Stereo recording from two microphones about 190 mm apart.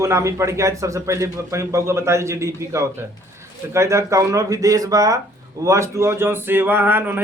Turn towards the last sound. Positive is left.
turn(degrees=-10)  # may be behind; listen again after turning